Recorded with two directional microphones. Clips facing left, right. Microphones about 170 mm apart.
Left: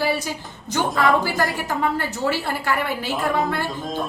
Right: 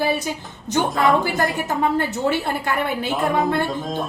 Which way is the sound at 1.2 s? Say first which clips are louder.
Right 1 dB; 20° right (ahead or behind).